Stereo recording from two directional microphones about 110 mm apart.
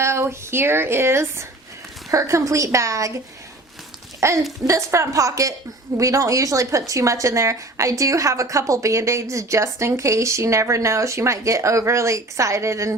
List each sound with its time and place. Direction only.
0.0 s speech: 25° right (ahead or behind)
4.2 s speech: 25° right (ahead or behind)